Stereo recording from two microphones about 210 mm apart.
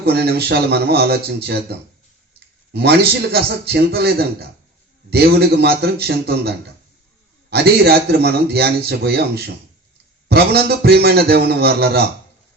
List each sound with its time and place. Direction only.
0.0 s a man's voice: 50° right (ahead or behind)
2.7 s a man's voice: 50° right (ahead or behind)
7.5 s a man's voice: 50° right (ahead or behind)